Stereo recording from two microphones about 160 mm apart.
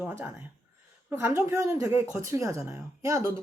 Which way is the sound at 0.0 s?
15° right (ahead or behind).